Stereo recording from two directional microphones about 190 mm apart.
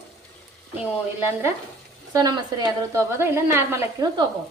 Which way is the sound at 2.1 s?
20° right (ahead or behind).